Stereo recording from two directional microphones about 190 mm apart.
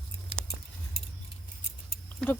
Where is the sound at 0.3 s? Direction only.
35° left (ahead or behind).